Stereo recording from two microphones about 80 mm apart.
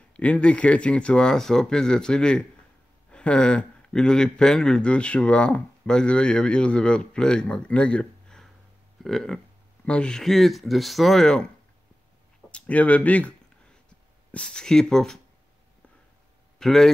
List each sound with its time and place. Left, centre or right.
0.1 s speech: centre
12.4 s speech: centre
14.3 s speech: centre
16.5 s speech: centre